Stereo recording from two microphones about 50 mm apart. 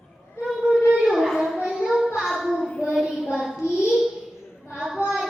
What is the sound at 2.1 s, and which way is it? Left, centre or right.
Hands, centre.